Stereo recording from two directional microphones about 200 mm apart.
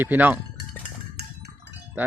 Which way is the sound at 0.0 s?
10° right (ahead or behind).